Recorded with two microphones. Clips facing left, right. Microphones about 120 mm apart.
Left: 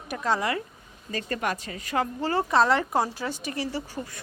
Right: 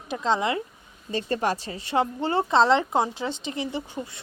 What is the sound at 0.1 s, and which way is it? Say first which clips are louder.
Speech: right 2 dB; 20° right (ahead or behind).